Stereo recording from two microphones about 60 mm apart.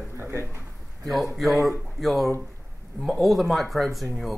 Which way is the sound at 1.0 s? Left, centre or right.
Centre.